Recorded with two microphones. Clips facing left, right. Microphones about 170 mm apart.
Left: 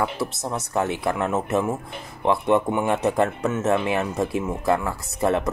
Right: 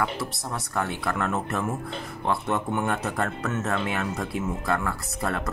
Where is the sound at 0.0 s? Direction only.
20° left (ahead or behind).